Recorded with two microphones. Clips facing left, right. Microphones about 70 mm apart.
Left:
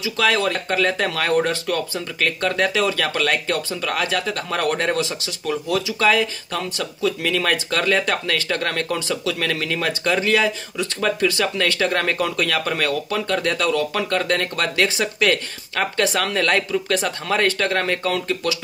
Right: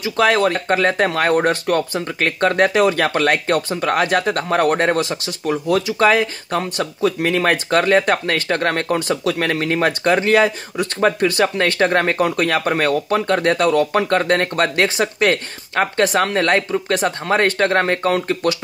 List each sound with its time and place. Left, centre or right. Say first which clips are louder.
0.0 s speech: right 4 dB; right